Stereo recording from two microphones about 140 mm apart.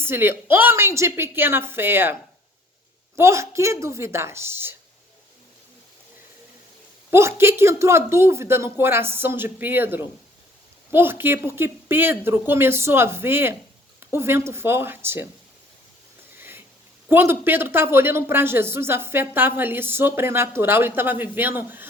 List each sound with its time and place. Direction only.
0.0 s speech: 15° right (ahead or behind)
3.2 s a woman's voice: 20° right (ahead or behind)
7.1 s speech: 20° right (ahead or behind)
16.4 s a sound: 15° right (ahead or behind)
17.1 s speech: 15° right (ahead or behind)